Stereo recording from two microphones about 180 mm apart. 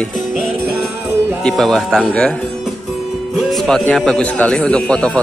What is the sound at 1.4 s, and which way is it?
Speech, 5° left (ahead or behind).